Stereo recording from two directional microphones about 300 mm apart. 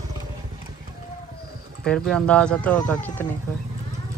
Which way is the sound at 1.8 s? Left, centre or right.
Centre.